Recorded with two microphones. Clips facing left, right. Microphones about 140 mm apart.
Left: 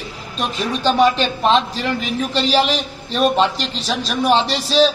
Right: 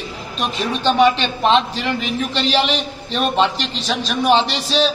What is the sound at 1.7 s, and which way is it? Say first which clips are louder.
A man's voice: even; 35° left (ahead or behind).